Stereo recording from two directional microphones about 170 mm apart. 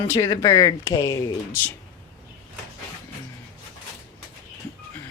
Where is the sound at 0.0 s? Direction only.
25° left (ahead or behind).